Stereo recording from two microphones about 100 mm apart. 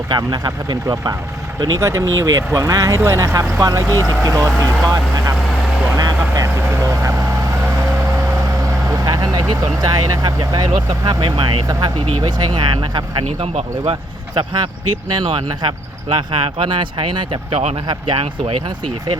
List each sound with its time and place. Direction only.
0.1 s speech: 45° right (ahead or behind)
1.8 s speech: 30° right (ahead or behind)
6.0 s vehicle: 40° right (ahead or behind)
6.6 s speech: 30° right (ahead or behind)
8.9 s speech: 35° right (ahead or behind)
13.2 s speech: 90° right
14.3 s speech: 45° right (ahead or behind)
15.1 s speech: 55° right (ahead or behind)
18.1 s speech: 70° right (ahead or behind)